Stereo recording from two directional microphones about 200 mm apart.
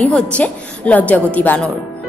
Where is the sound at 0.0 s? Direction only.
5° left (ahead or behind).